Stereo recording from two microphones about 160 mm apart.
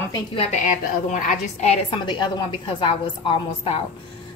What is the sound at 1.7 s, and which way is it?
A woman's voice, 30° left (ahead or behind).